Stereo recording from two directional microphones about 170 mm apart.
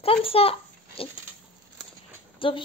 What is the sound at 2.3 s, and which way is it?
Speech, 30° left (ahead or behind).